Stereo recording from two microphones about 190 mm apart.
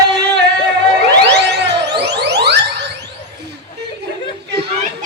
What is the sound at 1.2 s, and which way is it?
Music, 60° right (ahead or behind).